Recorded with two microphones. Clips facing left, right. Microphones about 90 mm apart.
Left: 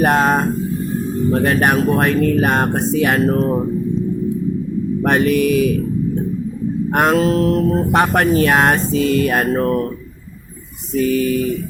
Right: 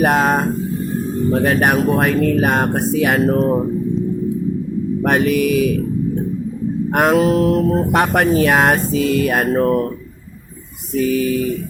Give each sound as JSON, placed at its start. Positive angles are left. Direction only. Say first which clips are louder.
{"t": 0.0, "sound": "speech", "louder": "even", "side_deg": 0}
{"t": 5.0, "sound": "speech", "louder": "left 1 dB", "side_deg": -5}
{"t": 6.9, "sound": "speech", "louder": "right 1 dB", "side_deg": -5}
{"t": 7.2, "sound": "music", "louder": "right 1 dB", "side_deg": -15}
{"t": 7.9, "sound": "speech", "louder": "left 1 dB", "side_deg": 0}
{"t": 9.5, "sound": "music", "louder": "right 2 dB", "side_deg": -10}
{"t": 10.9, "sound": "speech", "louder": "left 1 dB", "side_deg": -5}